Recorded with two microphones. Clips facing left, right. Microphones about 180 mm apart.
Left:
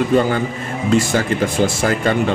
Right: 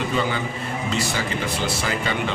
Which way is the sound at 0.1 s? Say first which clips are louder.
Left 8 dB; 50° left (ahead or behind).